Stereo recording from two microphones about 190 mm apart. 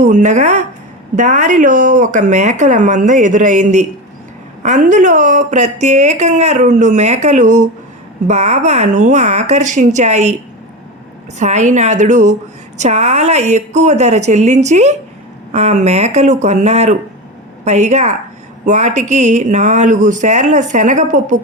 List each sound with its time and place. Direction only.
0.0 s a woman's voice: 40° right (ahead or behind)
11.3 s a woman's voice: 40° right (ahead or behind)